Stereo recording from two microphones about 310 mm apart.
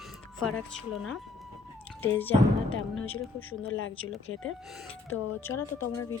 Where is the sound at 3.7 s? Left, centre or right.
Left.